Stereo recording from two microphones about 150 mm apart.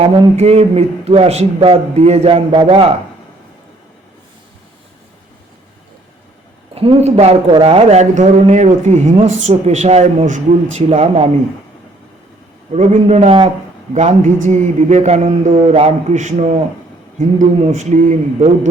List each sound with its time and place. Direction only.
0.3 s speech: 45° right (ahead or behind)
6.7 s speech: 40° right (ahead or behind)
12.7 s speech: 50° right (ahead or behind)
13.9 s speech: 55° right (ahead or behind)